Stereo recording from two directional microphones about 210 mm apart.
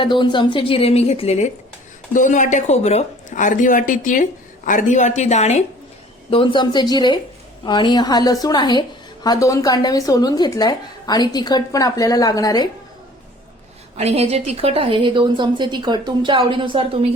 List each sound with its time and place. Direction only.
0.0 s a woman's voice: 20° left (ahead or behind)
13.9 s a woman's voice: 30° right (ahead or behind)